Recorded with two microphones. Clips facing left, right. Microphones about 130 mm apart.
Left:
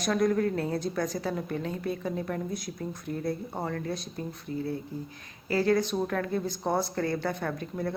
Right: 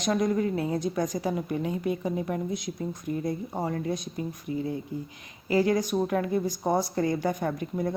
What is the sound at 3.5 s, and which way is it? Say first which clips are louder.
Speech: right 3 dB; 15° right (ahead or behind).